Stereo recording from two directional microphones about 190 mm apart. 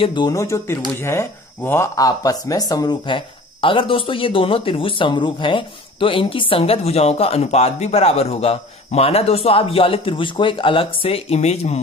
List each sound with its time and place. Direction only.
0.0 s speech: 25° left (ahead or behind)